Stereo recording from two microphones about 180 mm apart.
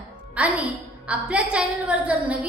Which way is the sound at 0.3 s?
5° right (ahead or behind).